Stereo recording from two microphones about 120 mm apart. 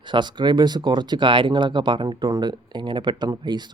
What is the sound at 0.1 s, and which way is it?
Speech, 40° right (ahead or behind).